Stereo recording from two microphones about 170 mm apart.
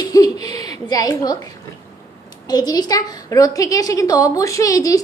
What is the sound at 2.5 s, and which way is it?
A woman's voice, 25° left (ahead or behind).